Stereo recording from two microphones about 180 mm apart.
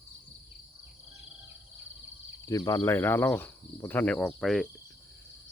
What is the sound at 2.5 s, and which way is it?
Speech, 20° left (ahead or behind).